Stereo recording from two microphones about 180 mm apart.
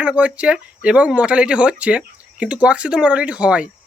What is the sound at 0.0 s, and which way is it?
Speech, 5° right (ahead or behind).